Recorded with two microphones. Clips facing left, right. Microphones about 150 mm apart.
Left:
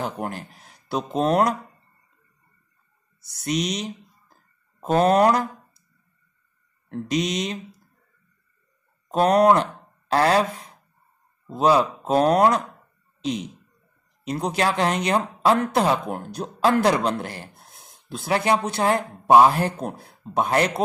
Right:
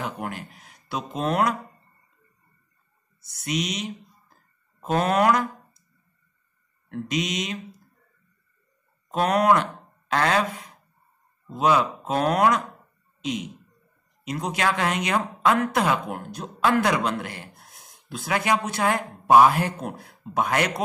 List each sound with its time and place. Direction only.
0.0 s speech: 35° left (ahead or behind)
3.2 s speech: 35° left (ahead or behind)
4.9 s speech: 35° left (ahead or behind)
6.9 s speech: 35° left (ahead or behind)
9.1 s speech: 35° left (ahead or behind)
11.5 s speech: 35° left (ahead or behind)